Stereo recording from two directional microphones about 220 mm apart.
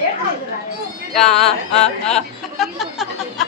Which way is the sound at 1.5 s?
30° left (ahead or behind).